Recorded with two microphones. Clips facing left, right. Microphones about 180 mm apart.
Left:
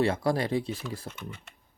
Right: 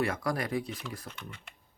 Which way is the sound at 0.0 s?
30° left (ahead or behind).